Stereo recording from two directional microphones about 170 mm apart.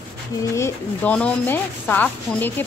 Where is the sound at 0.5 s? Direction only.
10° left (ahead or behind).